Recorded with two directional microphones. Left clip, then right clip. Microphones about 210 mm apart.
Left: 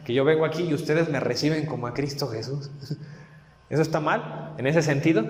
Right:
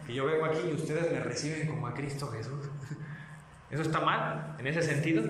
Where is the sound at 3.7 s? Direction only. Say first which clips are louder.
Left 6 dB; 50° left (ahead or behind).